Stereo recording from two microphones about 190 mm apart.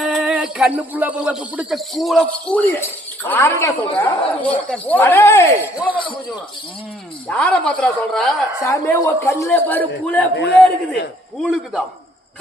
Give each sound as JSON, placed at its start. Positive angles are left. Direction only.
{"t": 0.0, "sound": "speech", "side_deg": -5}
{"t": 3.2, "sound": "speech", "side_deg": 10}
{"t": 7.3, "sound": "a woman's voice", "side_deg": 5}
{"t": 8.6, "sound": "speech", "side_deg": 15}
{"t": 10.3, "sound": "a man's voice", "side_deg": 65}
{"t": 11.4, "sound": "a woman's voice", "side_deg": -5}